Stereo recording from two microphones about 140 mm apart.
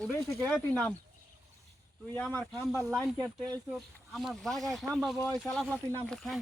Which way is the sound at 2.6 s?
Centre (ahead or behind).